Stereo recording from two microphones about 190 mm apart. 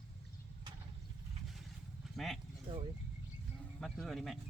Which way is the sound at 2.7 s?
25° right (ahead or behind).